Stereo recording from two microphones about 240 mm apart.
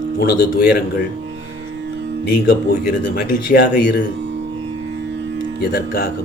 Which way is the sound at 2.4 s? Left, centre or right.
Left.